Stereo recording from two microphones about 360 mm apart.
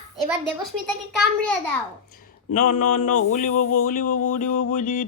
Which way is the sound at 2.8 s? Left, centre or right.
Left.